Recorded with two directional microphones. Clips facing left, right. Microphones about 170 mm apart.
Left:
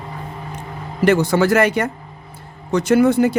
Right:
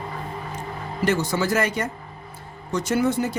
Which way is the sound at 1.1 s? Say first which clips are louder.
Left 8 dB; 65° left (ahead or behind).